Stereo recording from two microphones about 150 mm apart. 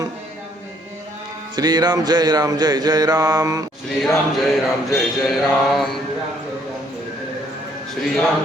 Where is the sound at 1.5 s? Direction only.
30° right (ahead or behind).